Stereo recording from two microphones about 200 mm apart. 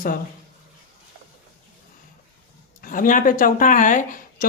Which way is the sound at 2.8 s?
45° left (ahead or behind).